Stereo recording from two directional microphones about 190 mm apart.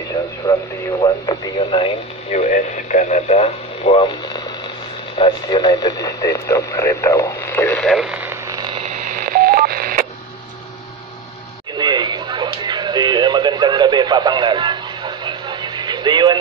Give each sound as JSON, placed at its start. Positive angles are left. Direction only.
{"t": 1.0, "sound": "speech", "side_deg": 25}
{"t": 2.2, "sound": "radio", "side_deg": 40}
{"t": 8.8, "sound": "telephone dialing", "side_deg": -45}
{"t": 11.8, "sound": "radio", "side_deg": -25}